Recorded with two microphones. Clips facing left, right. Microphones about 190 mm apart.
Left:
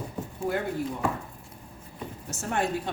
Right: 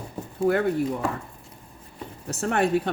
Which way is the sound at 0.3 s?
65° right (ahead or behind).